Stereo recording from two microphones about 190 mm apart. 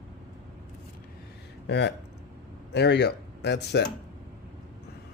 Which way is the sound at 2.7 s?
65° left (ahead or behind).